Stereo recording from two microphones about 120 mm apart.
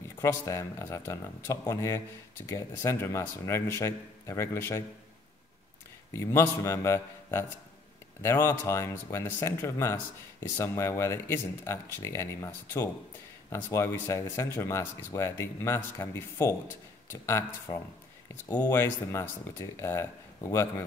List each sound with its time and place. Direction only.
0.2 s speech: 25° left (ahead or behind)
6.1 s speech: 25° left (ahead or behind)